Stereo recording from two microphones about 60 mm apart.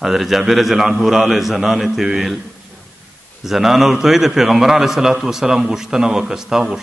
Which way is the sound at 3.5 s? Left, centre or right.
Centre.